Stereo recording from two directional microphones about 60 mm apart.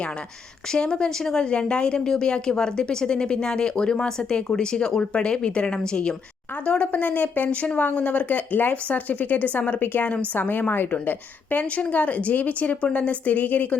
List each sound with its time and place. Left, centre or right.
0.7 s a woman's voice: centre